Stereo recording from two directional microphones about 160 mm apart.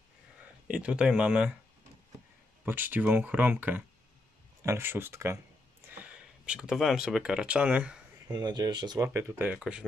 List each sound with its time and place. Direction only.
0.7 s speech: 5° right (ahead or behind)
2.6 s speech: 15° right (ahead or behind)
5.9 s speech: 5° right (ahead or behind)
8.3 s speech: 25° right (ahead or behind); by 9.8 s 5° right (ahead or behind)